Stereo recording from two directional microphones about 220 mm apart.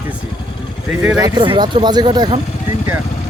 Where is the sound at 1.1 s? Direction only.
20° right (ahead or behind).